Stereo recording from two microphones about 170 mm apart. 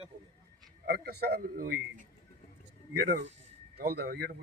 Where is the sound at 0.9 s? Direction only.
70° right (ahead or behind); by 2.1 s 55° right (ahead or behind).